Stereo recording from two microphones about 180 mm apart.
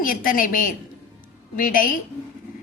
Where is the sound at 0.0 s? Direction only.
50° left (ahead or behind).